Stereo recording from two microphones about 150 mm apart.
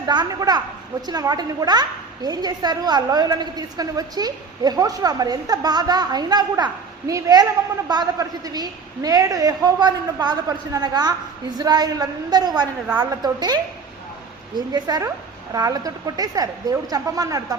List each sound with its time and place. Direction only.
0.0 s a woman's voice: 30° right (ahead or behind)